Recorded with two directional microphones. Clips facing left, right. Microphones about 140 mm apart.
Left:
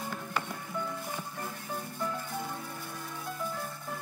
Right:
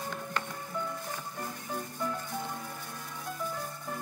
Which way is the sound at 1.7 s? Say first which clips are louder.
Right 1 dB; 5° left (ahead or behind).